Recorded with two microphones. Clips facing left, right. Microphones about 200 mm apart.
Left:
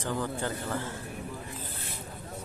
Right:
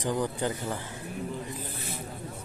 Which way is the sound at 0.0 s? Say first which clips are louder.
Right 3 dB; 15° right (ahead or behind).